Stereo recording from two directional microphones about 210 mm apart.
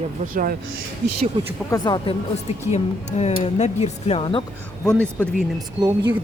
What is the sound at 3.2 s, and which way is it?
Speech, 30° left (ahead or behind).